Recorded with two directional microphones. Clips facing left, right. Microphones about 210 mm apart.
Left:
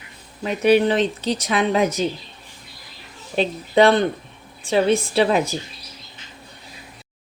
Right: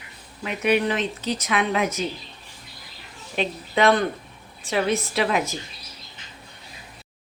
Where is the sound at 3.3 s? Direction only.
35° left (ahead or behind).